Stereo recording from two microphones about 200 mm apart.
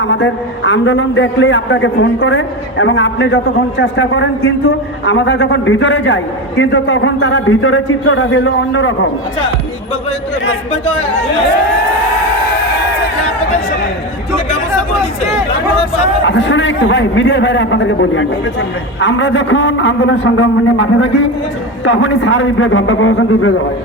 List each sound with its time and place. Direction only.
0.0 s a man's voice: 70° left (ahead or behind)
16.2 s a man's voice: 65° left (ahead or behind); by 23.6 s 80° left